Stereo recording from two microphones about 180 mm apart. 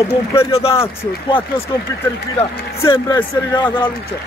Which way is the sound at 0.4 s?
35° left (ahead or behind).